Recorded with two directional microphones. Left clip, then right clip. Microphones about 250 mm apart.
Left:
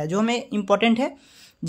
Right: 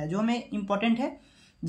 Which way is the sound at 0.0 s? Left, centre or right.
Left.